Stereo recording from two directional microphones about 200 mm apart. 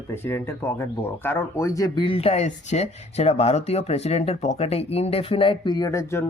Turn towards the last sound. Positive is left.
turn(degrees=15)  # may be behind; listen again after turning